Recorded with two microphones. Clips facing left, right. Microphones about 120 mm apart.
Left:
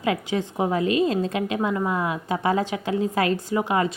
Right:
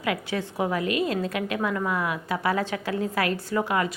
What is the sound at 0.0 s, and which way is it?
A woman's voice, 25° left (ahead or behind).